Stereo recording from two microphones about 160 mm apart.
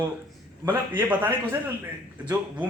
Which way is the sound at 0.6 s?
10° right (ahead or behind).